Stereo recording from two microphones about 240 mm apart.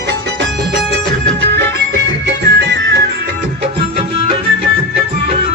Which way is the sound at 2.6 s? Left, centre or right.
Right.